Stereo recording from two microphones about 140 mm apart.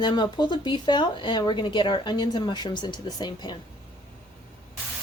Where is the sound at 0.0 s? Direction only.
30° left (ahead or behind).